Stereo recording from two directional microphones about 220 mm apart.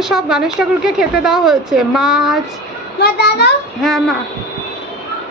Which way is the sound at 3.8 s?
Centre (ahead or behind).